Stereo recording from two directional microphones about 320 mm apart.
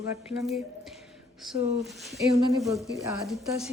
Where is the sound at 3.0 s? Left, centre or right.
Centre.